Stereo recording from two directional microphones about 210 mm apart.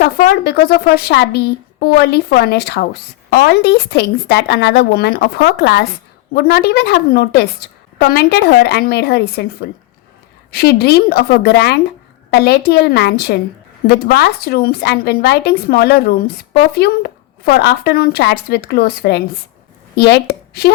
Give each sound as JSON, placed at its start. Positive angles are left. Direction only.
{"t": 0.0, "sound": "a woman's voice", "side_deg": 45}